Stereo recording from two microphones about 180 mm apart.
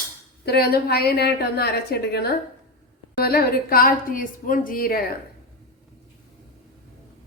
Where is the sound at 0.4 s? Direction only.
60° left (ahead or behind).